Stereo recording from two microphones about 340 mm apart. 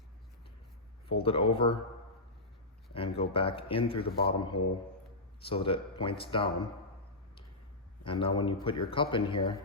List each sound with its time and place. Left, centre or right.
1.0 s speech: centre
2.9 s speech: centre
4.0 s a man's voice: left
5.4 s speech: centre
8.0 s speech: centre